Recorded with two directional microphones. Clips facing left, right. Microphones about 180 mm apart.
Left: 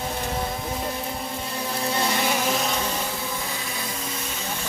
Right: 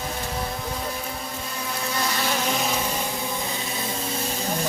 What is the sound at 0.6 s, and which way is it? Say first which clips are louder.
Vehicle: left 1 dB; 25° left (ahead or behind).